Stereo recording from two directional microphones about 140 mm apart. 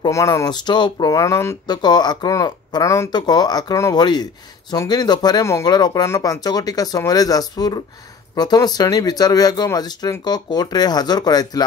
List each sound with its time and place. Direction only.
0.1 s speech: 20° left (ahead or behind)